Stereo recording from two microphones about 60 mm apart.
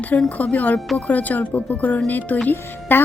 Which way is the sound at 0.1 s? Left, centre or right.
Left.